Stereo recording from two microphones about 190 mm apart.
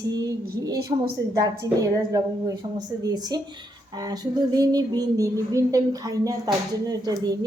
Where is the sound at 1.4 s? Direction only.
20° right (ahead or behind).